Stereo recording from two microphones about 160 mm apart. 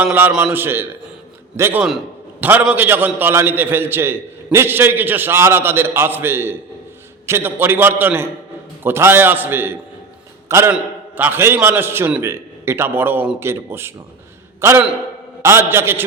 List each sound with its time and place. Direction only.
0.0 s a man's voice: 10° right (ahead or behind)